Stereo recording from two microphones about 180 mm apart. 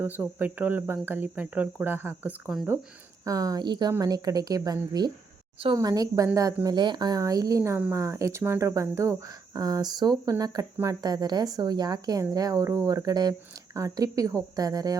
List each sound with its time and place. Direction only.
0.0 s speech: 10° right (ahead or behind)